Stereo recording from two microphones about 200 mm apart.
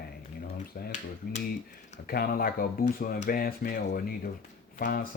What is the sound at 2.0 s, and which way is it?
Speech, 50° left (ahead or behind).